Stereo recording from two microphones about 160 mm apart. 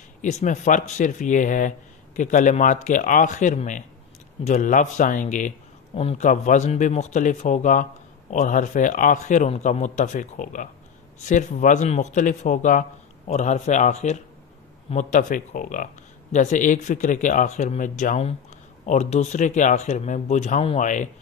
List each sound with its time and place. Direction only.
0.2 s a man's voice: 50° left (ahead or behind)